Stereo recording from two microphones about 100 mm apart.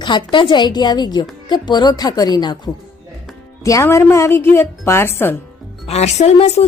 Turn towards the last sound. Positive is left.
turn(degrees=90)